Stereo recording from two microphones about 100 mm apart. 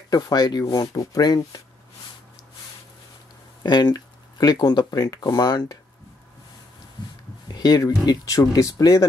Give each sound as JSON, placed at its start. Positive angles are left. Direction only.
{"t": 0.1, "sound": "speech", "side_deg": 40}
{"t": 3.6, "sound": "speech", "side_deg": 45}
{"t": 7.5, "sound": "speech", "side_deg": 40}